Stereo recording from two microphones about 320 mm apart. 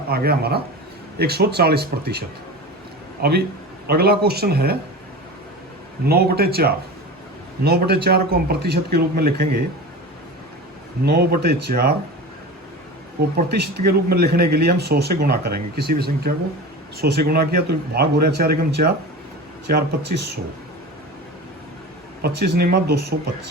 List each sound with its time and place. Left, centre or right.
0.1 s a man's voice: right
6.1 s speech: right
11.0 s speech: right
13.5 s speech: right
22.2 s speech: right